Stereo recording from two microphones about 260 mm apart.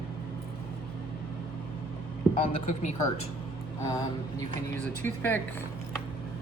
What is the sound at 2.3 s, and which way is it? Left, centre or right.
Speech, left.